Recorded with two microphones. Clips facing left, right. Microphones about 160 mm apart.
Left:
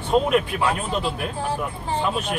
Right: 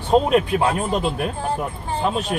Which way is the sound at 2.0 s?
35° right (ahead or behind).